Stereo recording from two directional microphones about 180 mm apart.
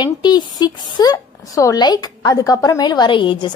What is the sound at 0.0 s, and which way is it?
A woman's voice, 25° left (ahead or behind).